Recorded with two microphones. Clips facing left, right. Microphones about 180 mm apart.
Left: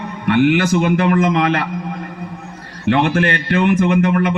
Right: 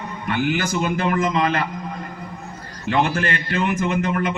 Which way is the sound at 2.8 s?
65° left (ahead or behind).